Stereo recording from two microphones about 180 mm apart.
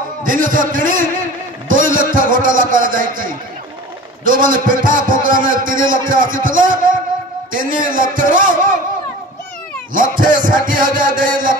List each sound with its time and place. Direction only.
0.2 s a man's voice: 50° right (ahead or behind)
9.9 s a man's voice: 50° right (ahead or behind)